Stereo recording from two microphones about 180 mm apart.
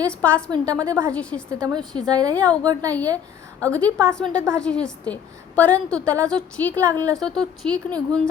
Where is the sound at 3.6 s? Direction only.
5° left (ahead or behind).